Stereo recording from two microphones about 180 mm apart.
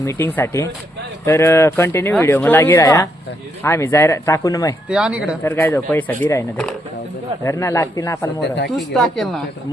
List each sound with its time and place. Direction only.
0.0 s speech: 15° left (ahead or behind)
4.9 s speech: 5° right (ahead or behind)
5.4 s speech: 15° left (ahead or behind)
8.4 s speech: 70° left (ahead or behind)
8.7 s speech: centre (ahead or behind)